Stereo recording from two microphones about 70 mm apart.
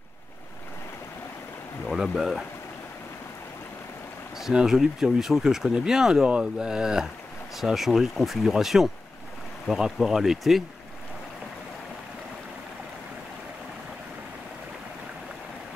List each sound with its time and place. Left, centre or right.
1.9 s speech: centre
4.4 s speech: centre